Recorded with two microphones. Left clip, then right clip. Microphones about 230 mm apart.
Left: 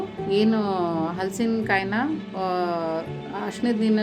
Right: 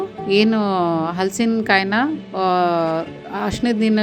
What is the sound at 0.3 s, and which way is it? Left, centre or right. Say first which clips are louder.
A woman's voice: right 5 dB; right.